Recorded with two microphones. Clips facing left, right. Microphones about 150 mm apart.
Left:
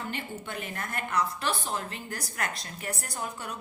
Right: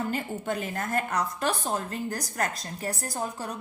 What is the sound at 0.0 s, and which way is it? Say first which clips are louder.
A woman's voice: right 6 dB; 40° right (ahead or behind).